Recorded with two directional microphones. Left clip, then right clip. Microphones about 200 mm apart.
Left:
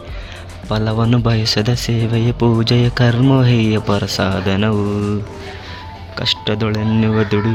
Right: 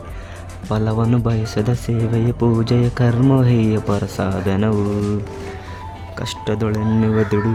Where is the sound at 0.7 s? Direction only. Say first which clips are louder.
Left 2 dB; 10° right (ahead or behind).